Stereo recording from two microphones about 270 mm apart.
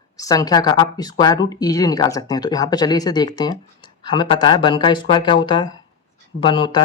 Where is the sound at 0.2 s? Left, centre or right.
Centre.